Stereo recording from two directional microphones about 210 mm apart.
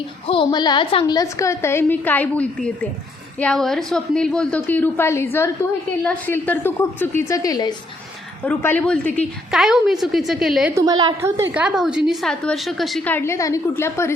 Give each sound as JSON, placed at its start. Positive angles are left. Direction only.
{"t": 0.3, "sound": "a woman's voice", "side_deg": 20}
{"t": 8.4, "sound": "a woman's voice", "side_deg": 5}